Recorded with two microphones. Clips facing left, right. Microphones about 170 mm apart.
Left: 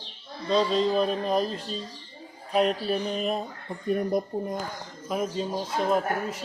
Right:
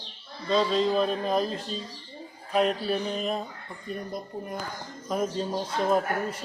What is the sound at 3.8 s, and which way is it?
Speech, 55° left (ahead or behind).